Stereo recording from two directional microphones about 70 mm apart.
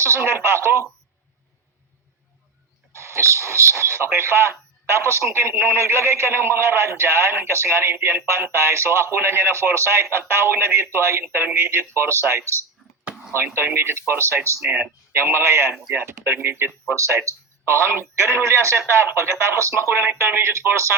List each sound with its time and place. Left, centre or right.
0.0 s a man's voice: right
2.9 s a man's voice: right
14.7 s a man's voice: right